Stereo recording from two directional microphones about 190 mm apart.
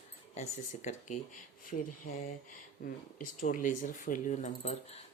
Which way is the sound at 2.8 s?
50° left (ahead or behind).